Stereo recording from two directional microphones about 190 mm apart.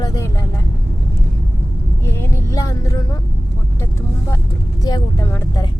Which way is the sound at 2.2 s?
15° left (ahead or behind).